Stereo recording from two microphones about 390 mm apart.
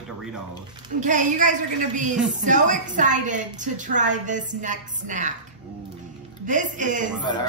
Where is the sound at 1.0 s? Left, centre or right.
Centre.